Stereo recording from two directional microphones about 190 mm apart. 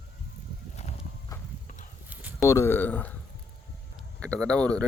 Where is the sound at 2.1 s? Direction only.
10° right (ahead or behind).